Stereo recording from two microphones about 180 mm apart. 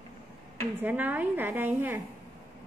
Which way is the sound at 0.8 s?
10° right (ahead or behind).